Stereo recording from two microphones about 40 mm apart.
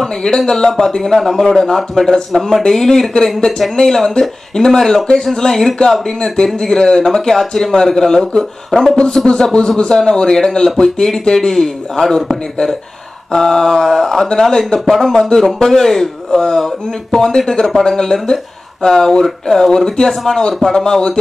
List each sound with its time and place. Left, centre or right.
0.0 s speech: centre
13.3 s speech: centre
15.1 s speech: centre